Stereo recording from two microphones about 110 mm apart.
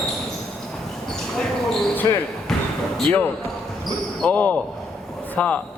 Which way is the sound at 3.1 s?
15° left (ahead or behind).